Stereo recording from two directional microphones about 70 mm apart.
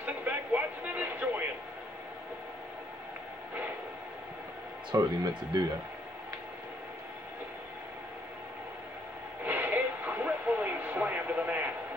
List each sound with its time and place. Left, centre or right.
0.0 s a sound: right
4.9 s speech: right
9.4 s radio: right